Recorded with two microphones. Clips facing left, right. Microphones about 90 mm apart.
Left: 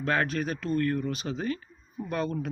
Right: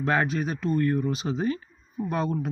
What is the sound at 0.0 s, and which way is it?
Speech, 15° right (ahead or behind).